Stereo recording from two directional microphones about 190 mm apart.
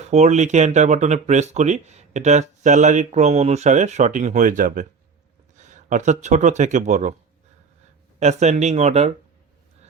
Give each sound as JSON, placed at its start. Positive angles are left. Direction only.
{"t": 0.1, "sound": "speech", "side_deg": -35}
{"t": 8.2, "sound": "speech", "side_deg": -35}